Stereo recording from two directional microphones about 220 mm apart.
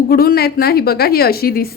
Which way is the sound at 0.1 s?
45° left (ahead or behind).